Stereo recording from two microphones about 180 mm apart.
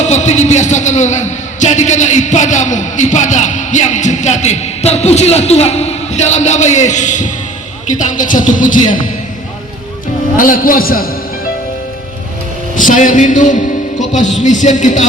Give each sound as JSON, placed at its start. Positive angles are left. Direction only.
{"t": 0.0, "sound": "a man's voice", "side_deg": 40}
{"t": 10.3, "sound": "speech", "side_deg": 50}
{"t": 12.7, "sound": "a man's voice", "side_deg": 45}